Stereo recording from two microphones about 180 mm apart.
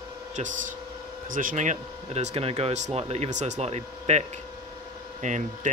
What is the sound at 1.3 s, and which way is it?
Speech, 50° right (ahead or behind).